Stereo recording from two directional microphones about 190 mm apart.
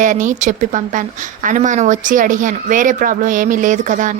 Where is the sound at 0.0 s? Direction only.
40° right (ahead or behind).